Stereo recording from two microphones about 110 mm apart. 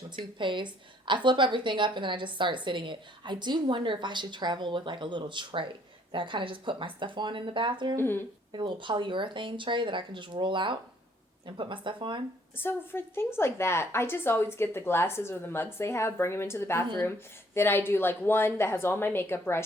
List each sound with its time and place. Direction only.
0.3 s a woman's voice: 45° right (ahead or behind)
7.9 s a woman's voice: 20° left (ahead or behind)
8.5 s a woman's voice: 45° right (ahead or behind)
12.5 s a woman's voice: 20° left (ahead or behind)